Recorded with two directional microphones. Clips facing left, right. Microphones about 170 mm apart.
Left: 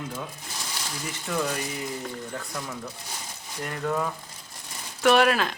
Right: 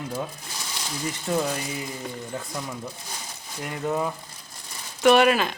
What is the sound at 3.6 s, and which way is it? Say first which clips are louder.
Speech: right 1 dB; 10° right (ahead or behind).